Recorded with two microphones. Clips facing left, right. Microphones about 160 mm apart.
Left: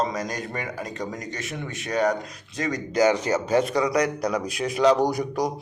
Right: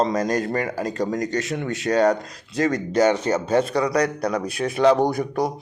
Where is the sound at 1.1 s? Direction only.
80° right.